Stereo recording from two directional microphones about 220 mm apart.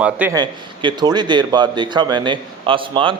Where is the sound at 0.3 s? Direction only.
20° right (ahead or behind).